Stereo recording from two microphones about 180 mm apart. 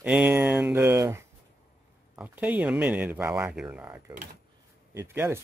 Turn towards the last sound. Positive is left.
turn(degrees=-15)  # may be behind; listen again after turning